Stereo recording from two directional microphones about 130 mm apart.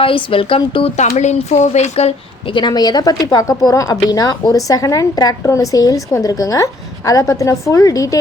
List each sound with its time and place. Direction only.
0.0 s speech: 45° left (ahead or behind)
0.9 s speech: 60° left (ahead or behind)
2.6 s speech: 35° left (ahead or behind)